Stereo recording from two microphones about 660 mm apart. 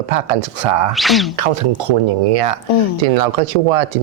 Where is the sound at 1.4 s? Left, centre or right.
Right.